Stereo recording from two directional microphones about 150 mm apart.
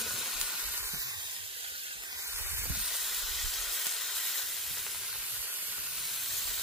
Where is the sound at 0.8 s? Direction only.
20° right (ahead or behind).